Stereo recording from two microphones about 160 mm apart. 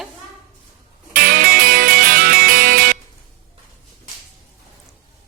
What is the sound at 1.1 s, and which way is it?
Music, 65° right (ahead or behind).